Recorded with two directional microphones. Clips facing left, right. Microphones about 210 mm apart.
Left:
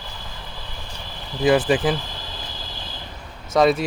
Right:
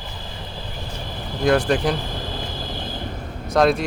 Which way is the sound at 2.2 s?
55° right (ahead or behind).